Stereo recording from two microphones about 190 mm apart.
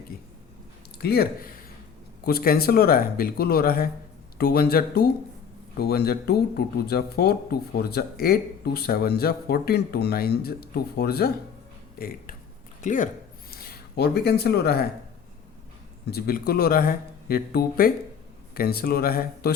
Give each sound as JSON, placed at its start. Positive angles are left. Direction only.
{"t": 1.0, "sound": "speech", "side_deg": 55}
{"t": 16.0, "sound": "speech", "side_deg": 55}